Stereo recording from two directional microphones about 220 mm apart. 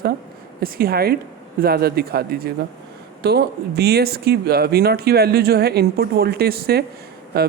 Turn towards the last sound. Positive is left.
turn(degrees=-45)  # may be behind; listen again after turning